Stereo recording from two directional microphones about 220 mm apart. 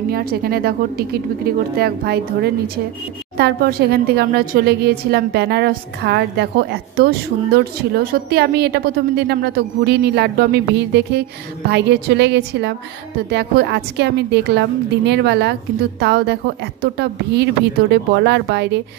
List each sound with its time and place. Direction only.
0.1 s a woman's voice: 45° right (ahead or behind)